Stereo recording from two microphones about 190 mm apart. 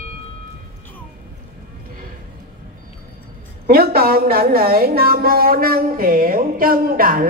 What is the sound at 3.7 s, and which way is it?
A woman's voice, 50° right (ahead or behind).